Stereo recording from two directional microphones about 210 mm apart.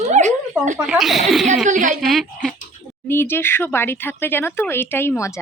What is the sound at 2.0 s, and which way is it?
Speech, centre (ahead or behind).